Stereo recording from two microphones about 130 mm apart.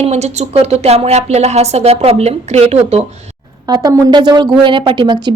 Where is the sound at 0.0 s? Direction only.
55° right (ahead or behind).